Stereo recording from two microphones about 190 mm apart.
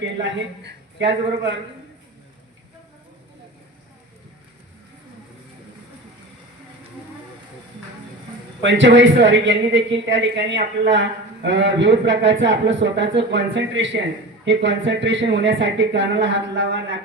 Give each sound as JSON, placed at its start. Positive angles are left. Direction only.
{"t": 0.2, "sound": "a man's voice", "side_deg": -70}
{"t": 8.6, "sound": "a man's voice", "side_deg": -75}